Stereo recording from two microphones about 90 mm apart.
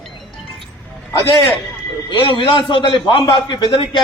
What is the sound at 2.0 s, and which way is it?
A man's voice, 65° left (ahead or behind).